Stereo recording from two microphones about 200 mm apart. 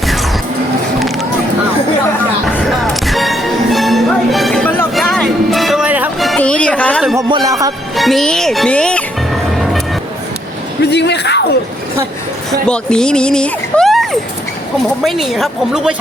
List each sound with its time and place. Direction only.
0.9 s a sound: centre (ahead or behind)
2.8 s music: centre (ahead or behind)
7.2 s music: 20° right (ahead or behind)
7.9 s music: centre (ahead or behind)
10.8 s a sound: 60° left (ahead or behind)
12.5 s a woman's voice: 5° left (ahead or behind)